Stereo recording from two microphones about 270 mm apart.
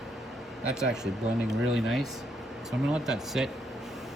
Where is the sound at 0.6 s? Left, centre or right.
Centre.